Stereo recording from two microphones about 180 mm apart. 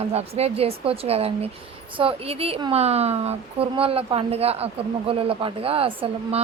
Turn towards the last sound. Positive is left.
turn(degrees=-30)  # may be behind; listen again after turning